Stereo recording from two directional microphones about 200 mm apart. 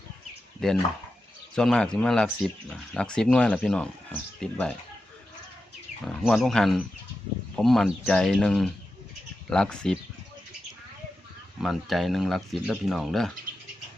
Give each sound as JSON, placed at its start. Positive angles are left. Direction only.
{"t": 0.6, "sound": "speech", "side_deg": 5}
{"t": 6.1, "sound": "speech", "side_deg": 0}
{"t": 11.6, "sound": "speech", "side_deg": 0}